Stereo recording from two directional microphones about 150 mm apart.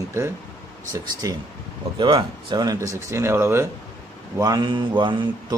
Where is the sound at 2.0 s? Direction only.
30° right (ahead or behind); by 3.7 s 15° right (ahead or behind).